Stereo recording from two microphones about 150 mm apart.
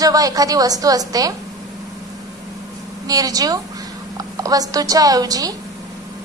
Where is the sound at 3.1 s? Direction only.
25° right (ahead or behind).